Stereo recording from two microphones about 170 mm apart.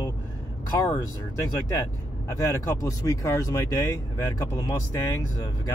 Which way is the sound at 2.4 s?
20° left (ahead or behind).